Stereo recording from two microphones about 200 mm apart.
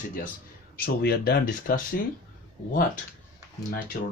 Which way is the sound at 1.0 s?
50° left (ahead or behind).